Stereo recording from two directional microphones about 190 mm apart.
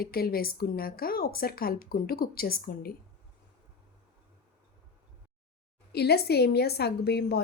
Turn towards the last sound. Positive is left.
turn(degrees=60)  # may be behind; listen again after turning